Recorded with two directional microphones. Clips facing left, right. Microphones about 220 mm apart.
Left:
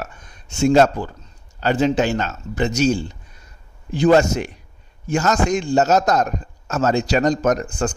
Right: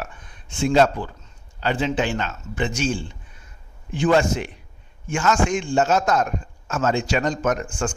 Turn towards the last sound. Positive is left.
turn(degrees=35)  # may be behind; listen again after turning